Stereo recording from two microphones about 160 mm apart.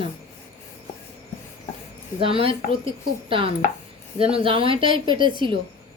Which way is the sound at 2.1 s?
35° right (ahead or behind).